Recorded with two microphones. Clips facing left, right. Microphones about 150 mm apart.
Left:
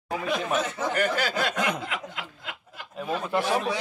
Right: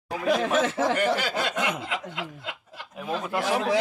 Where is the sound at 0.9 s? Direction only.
25° right (ahead or behind).